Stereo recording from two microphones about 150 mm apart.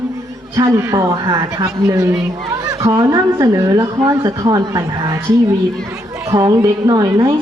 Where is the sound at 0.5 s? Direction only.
20° right (ahead or behind).